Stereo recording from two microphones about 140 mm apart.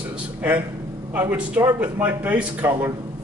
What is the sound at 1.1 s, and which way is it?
A man's voice, 10° right (ahead or behind).